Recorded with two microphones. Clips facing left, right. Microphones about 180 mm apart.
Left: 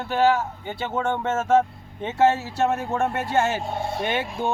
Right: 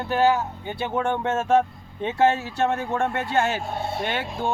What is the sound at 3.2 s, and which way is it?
Speech, 20° left (ahead or behind).